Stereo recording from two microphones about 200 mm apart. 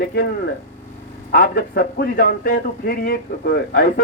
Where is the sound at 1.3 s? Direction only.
50° left (ahead or behind).